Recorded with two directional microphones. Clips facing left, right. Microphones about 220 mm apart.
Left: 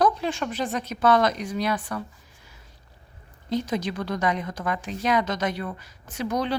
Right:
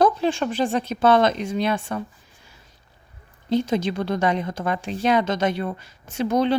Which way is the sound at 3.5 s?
25° right (ahead or behind).